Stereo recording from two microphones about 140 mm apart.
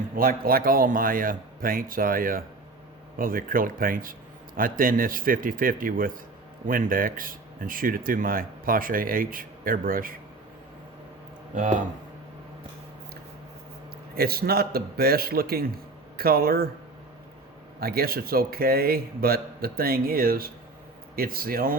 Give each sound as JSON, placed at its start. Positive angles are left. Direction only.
{"t": 0.2, "sound": "speech", "side_deg": -90}
{"t": 11.5, "sound": "speech", "side_deg": -65}
{"t": 14.2, "sound": "speech", "side_deg": -90}
{"t": 17.7, "sound": "speech", "side_deg": -90}